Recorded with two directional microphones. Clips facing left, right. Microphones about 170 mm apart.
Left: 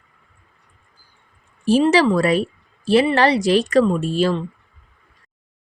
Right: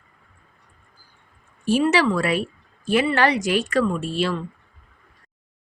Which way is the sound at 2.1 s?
40° left (ahead or behind).